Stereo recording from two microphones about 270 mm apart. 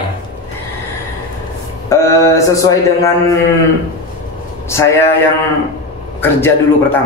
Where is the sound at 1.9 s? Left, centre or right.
Centre.